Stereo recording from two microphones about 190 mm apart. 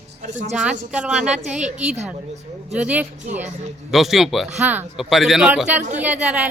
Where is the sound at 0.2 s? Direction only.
40° right (ahead or behind).